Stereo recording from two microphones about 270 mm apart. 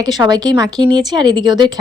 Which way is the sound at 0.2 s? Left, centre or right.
Centre.